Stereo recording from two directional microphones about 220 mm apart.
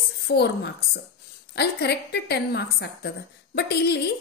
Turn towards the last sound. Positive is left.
turn(degrees=45)  # may be behind; listen again after turning